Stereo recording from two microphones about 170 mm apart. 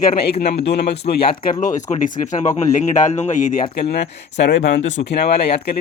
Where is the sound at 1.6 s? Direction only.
50° left (ahead or behind).